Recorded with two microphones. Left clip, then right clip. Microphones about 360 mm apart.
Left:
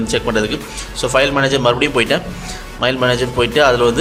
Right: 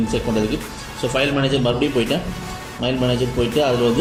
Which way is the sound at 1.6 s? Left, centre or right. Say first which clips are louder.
Left 5 dB; left.